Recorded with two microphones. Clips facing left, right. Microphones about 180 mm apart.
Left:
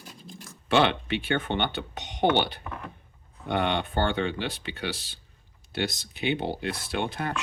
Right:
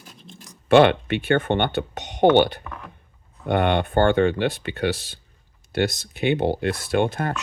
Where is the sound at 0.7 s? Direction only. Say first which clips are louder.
Right 8 dB; 55° right (ahead or behind).